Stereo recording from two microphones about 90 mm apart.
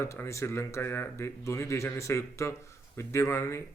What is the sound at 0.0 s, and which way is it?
Speech, 30° left (ahead or behind).